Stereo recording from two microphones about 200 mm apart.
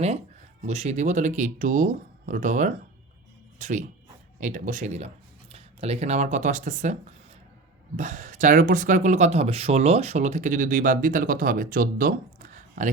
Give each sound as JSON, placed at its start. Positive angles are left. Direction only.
{"t": 0.6, "sound": "speech", "side_deg": -35}
{"t": 7.9, "sound": "speech", "side_deg": -40}